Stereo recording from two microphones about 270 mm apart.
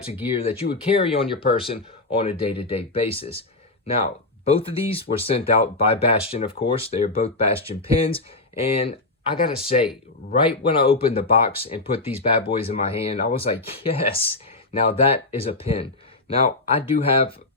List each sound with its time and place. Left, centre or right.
0.3 s speech: left